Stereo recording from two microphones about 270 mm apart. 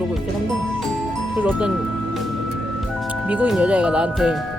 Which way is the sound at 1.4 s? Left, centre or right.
Centre.